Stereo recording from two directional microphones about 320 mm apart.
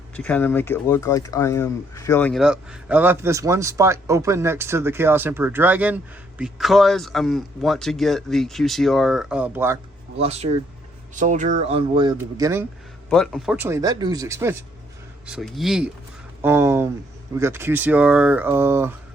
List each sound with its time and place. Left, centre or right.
0.2 s speech: centre
10.2 s speech: centre